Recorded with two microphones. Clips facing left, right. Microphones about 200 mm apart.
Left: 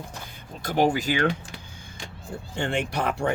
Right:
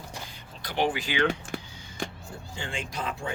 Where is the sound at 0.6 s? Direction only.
45° left (ahead or behind).